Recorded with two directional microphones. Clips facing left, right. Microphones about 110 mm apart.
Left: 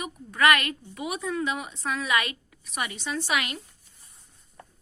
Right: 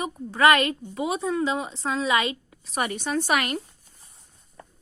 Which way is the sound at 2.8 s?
45° right (ahead or behind).